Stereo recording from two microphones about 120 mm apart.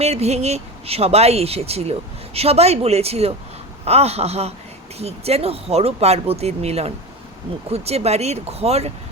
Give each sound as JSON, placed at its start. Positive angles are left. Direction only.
{"t": 0.0, "sound": "speech", "side_deg": -60}